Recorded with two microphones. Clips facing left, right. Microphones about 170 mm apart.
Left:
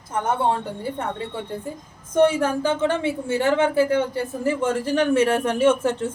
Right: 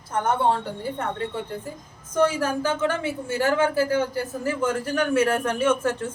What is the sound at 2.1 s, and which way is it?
A woman's voice, 25° left (ahead or behind).